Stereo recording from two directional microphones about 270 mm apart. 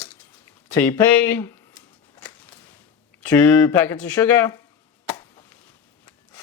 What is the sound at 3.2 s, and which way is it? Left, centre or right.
Speech, centre.